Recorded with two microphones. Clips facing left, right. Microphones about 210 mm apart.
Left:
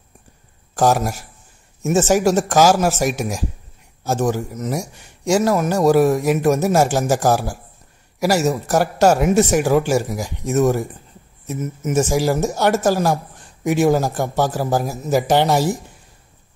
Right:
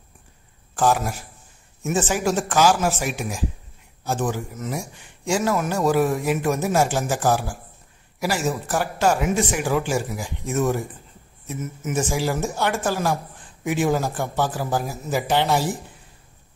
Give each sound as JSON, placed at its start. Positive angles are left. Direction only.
{"t": 0.7, "sound": "a man's voice", "side_deg": 40}